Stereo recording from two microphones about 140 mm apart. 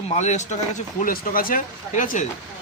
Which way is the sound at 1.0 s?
90° left.